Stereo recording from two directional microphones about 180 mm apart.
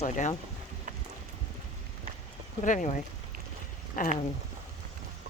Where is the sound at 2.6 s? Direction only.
45° left (ahead or behind).